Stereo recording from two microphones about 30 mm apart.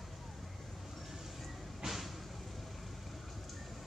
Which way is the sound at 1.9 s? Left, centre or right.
Centre.